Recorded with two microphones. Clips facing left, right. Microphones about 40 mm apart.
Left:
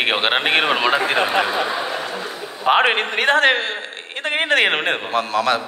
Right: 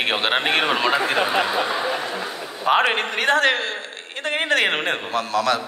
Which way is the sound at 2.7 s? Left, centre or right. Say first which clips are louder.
Left 3 dB; left.